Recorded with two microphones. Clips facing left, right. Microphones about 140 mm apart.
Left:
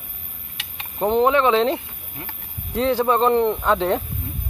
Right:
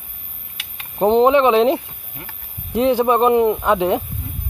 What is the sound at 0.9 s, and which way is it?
Speech, 20° right (ahead or behind).